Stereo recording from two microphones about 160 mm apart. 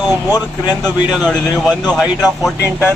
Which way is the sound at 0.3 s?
25° left (ahead or behind).